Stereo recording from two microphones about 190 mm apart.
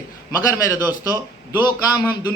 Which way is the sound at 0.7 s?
20° left (ahead or behind).